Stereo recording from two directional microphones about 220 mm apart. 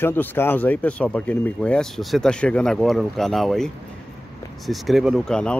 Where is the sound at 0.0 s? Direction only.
10° left (ahead or behind).